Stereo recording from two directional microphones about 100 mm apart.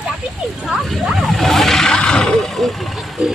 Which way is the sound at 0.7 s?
Centre (ahead or behind).